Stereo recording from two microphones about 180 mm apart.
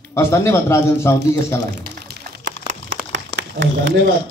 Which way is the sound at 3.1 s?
90° right.